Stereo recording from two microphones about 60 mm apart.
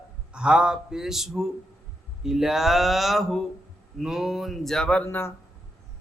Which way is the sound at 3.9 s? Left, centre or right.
Centre.